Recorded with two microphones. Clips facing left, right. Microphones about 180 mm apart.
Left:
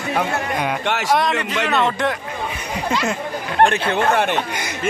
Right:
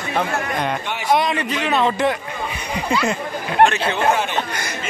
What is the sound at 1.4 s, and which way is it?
Speech, 75° left (ahead or behind).